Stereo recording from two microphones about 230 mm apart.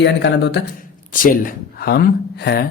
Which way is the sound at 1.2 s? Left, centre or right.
Left.